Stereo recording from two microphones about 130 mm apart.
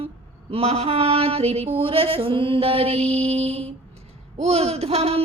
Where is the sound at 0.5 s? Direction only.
50° right (ahead or behind).